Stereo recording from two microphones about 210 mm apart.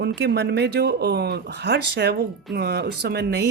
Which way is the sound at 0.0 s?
55° right (ahead or behind).